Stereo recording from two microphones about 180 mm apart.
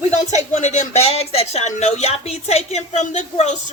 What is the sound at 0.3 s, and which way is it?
A woman's voice, 40° left (ahead or behind).